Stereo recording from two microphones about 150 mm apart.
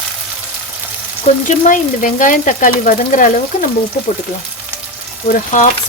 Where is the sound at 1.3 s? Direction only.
50° left (ahead or behind).